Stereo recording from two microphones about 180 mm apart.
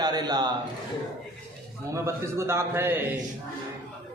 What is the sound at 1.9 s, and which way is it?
A man's voice, 15° right (ahead or behind).